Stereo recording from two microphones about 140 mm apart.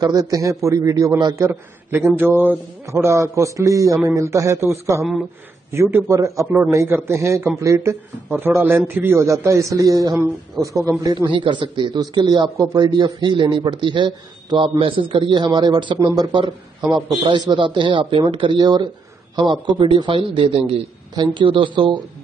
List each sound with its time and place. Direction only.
0.0 s a man's voice: 25° right (ahead or behind)
11.2 s a man's voice: 35° right (ahead or behind)